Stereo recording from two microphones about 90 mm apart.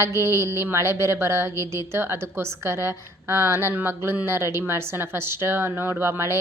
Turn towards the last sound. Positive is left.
turn(degrees=-30)  # may be behind; listen again after turning